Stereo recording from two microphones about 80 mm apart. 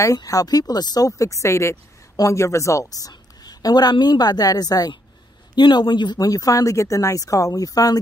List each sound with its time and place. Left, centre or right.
0.0 s speech: left